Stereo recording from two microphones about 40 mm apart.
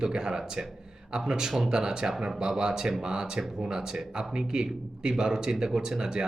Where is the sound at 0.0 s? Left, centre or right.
Centre.